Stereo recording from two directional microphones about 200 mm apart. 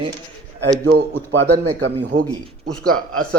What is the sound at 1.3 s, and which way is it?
Speech, 65° right (ahead or behind).